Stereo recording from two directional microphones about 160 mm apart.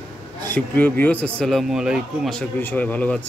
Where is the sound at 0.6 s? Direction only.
10° left (ahead or behind).